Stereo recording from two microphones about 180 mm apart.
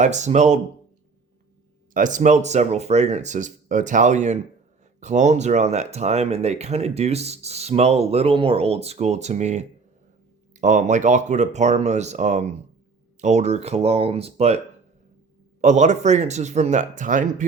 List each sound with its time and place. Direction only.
0.0 s speech: 40° right (ahead or behind)
1.9 s speech: 45° right (ahead or behind)
15.6 s speech: 40° right (ahead or behind)